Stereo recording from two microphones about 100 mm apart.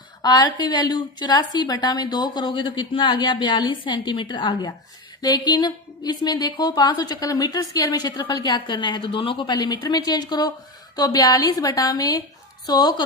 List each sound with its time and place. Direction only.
0.2 s a woman's voice: 40° left (ahead or behind); by 9.5 s 60° left (ahead or behind)
9.5 s a woman's voice: 40° left (ahead or behind)